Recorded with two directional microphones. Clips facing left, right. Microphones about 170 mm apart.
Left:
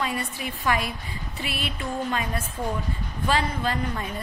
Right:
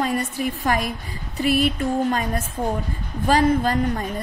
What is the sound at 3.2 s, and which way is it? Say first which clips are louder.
Speech: right 7 dB; 45° right (ahead or behind).